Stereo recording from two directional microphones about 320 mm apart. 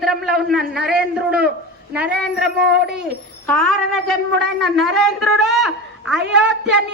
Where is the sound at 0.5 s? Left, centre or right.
Centre.